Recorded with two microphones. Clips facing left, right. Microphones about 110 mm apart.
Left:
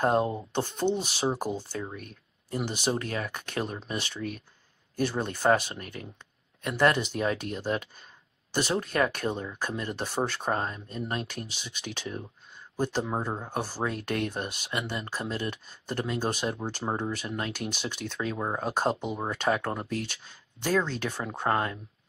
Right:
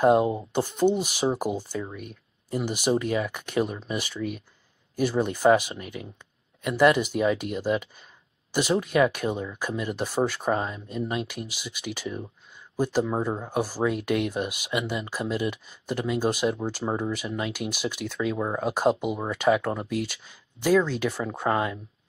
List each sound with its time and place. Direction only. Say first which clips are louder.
0.0 s speech: right 5 dB; 10° right (ahead or behind)
13.1 s speech: right 4 dB; 10° left (ahead or behind)
13.5 s speech: right 5 dB; 10° right (ahead or behind)
16.8 s speech: right 3 dB; 20° left (ahead or behind)
17.5 s speech: right 4 dB; 10° right (ahead or behind)